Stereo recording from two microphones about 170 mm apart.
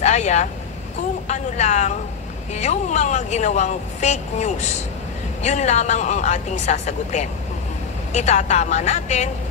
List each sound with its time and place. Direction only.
0.0 s speech: 40° left (ahead or behind)